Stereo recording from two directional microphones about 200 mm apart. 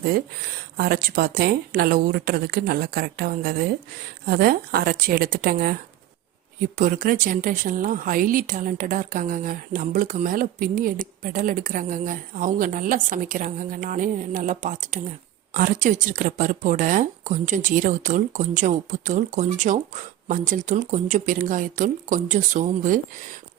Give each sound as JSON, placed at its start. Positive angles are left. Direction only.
{"t": 0.8, "sound": "speech", "side_deg": -50}